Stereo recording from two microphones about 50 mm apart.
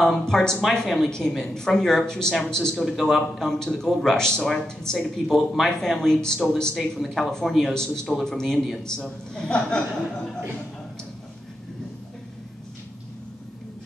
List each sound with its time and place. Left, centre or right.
0.0 s speech: centre